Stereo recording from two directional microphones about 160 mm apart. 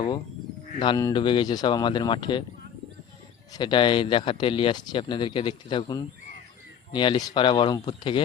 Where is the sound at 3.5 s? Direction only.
30° left (ahead or behind).